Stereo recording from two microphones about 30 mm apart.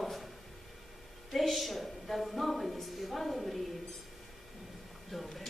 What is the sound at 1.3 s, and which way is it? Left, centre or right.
A woman's voice, centre.